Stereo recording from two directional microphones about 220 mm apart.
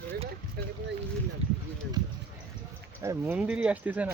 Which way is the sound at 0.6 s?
45° right (ahead or behind).